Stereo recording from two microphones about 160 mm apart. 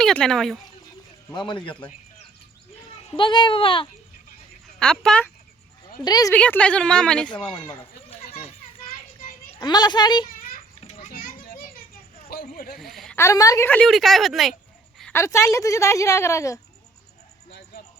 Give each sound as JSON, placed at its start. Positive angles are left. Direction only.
{"t": 0.0, "sound": "a woman's voice", "side_deg": 5}
{"t": 1.3, "sound": "a child's voice", "side_deg": 30}
{"t": 3.2, "sound": "a child's voice", "side_deg": 30}
{"t": 4.8, "sound": "a woman's voice", "side_deg": 5}
{"t": 6.0, "sound": "a woman's voice", "side_deg": 25}
{"t": 6.3, "sound": "speech", "side_deg": 10}
{"t": 9.6, "sound": "a woman's voice", "side_deg": 25}
{"t": 10.8, "sound": "children playing", "side_deg": 50}
{"t": 12.3, "sound": "a sound", "side_deg": 65}
{"t": 12.7, "sound": "speech", "side_deg": 0}
{"t": 13.1, "sound": "a woman's voice", "side_deg": 20}
{"t": 15.1, "sound": "speech", "side_deg": 15}